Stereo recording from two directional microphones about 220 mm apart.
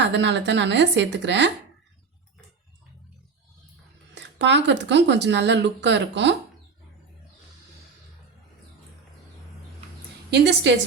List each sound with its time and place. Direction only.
0.0 s speech: 55° right (ahead or behind)
4.1 s speech: 50° right (ahead or behind)
10.3 s speech: 50° right (ahead or behind)